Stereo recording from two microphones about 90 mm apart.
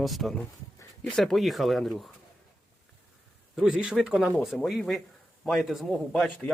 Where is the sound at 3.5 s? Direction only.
5° right (ahead or behind).